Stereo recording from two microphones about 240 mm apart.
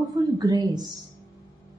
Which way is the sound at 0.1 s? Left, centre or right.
Centre.